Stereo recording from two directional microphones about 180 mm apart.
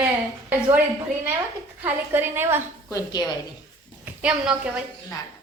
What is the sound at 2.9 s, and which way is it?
Speech, 20° left (ahead or behind).